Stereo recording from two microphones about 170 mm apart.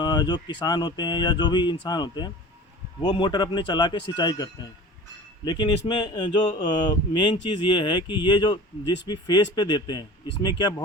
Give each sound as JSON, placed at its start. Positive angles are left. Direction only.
{"t": 0.0, "sound": "speech", "side_deg": 25}